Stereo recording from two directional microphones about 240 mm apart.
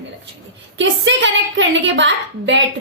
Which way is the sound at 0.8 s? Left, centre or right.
Right.